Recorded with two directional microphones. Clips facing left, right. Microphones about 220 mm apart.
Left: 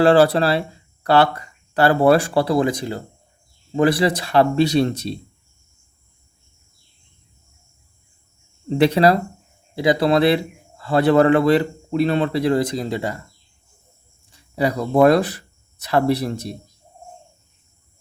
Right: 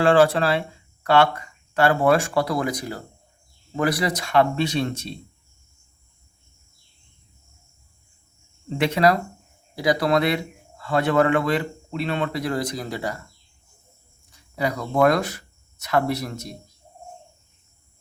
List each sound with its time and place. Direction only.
0.0 s a man's voice: 35° left (ahead or behind)
8.8 s a man's voice: 35° left (ahead or behind)
14.3 s speech: 30° left (ahead or behind)